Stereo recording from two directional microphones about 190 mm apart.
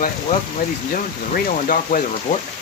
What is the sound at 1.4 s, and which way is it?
Speech, 45° left (ahead or behind).